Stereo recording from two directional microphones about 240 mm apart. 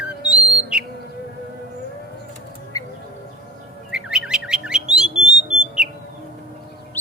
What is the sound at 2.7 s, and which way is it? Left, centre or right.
Music, centre.